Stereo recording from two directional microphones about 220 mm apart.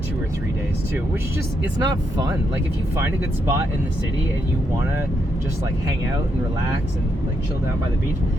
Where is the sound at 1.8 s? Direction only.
15° right (ahead or behind).